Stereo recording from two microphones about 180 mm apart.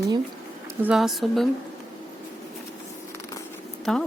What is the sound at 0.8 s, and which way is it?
Speech, 5° right (ahead or behind).